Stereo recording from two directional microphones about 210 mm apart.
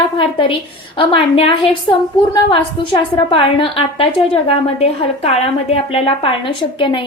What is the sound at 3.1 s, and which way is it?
A woman's voice, 25° left (ahead or behind).